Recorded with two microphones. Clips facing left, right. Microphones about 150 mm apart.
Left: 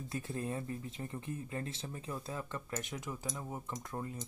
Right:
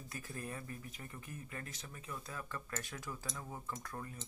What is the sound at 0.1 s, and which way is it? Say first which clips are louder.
Speech: left 7 dB; 25° left (ahead or behind).